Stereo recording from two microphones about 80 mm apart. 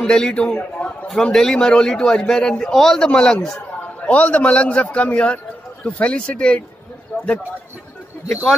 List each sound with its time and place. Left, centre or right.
0.0 s a man's voice: centre
1.0 s a man's voice: centre
4.0 s a man's voice: centre